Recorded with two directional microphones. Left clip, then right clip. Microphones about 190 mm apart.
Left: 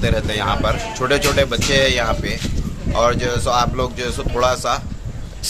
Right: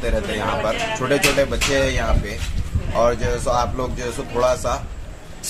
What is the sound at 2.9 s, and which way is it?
Speech, 20° left (ahead or behind).